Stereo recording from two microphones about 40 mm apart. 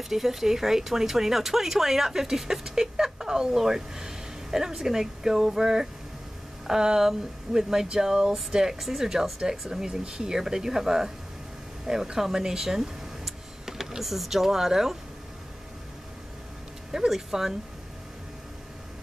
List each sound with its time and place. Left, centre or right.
0.0 s speech: centre
17.1 s speech: centre